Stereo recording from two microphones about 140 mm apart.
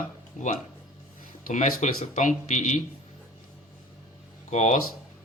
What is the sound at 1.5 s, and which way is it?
Speech, 60° left (ahead or behind).